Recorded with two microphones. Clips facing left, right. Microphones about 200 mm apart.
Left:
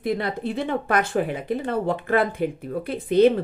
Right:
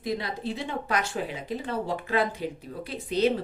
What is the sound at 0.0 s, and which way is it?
A woman's voice, 55° left (ahead or behind).